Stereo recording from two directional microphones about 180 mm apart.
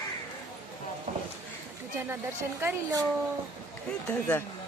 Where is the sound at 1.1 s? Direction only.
35° right (ahead or behind).